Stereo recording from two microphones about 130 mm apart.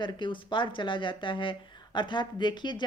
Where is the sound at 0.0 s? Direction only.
40° left (ahead or behind).